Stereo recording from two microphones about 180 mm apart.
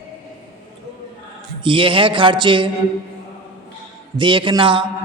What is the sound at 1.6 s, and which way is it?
A man's voice, 30° right (ahead or behind).